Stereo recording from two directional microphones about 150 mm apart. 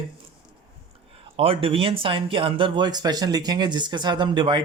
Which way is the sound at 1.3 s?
40° right (ahead or behind).